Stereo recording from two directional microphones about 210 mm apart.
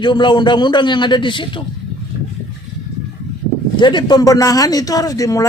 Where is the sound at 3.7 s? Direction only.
20° left (ahead or behind).